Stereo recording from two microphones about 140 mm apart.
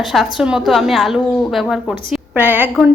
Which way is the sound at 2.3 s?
15° right (ahead or behind).